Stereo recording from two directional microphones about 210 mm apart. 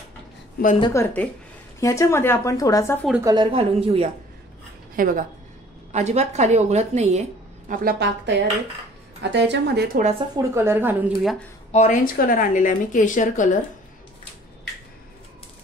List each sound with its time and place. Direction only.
0.7 s a woman's voice: 20° left (ahead or behind)
3.3 s speech: 25° right (ahead or behind)
4.9 s a woman's voice: 40° right (ahead or behind)
10.1 s speech: 15° right (ahead or behind)
11.7 s a woman's voice: 35° left (ahead or behind)